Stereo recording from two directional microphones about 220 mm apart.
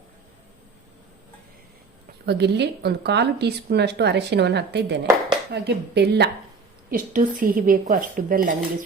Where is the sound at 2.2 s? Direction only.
50° right (ahead or behind).